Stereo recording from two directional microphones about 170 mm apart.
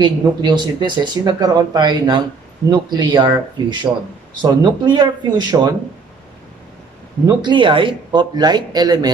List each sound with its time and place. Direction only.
0.0 s speech: 25° right (ahead or behind)
7.2 s speech: 25° right (ahead or behind)